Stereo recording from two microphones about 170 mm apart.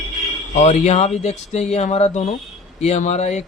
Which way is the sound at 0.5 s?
40° left (ahead or behind).